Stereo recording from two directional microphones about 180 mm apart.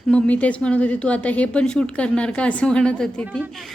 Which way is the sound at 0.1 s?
5° left (ahead or behind).